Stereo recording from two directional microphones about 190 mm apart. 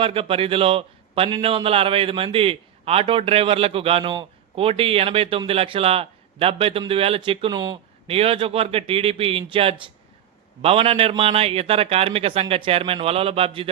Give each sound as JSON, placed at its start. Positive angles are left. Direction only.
{"t": 0.0, "sound": "a man's voice", "side_deg": -30}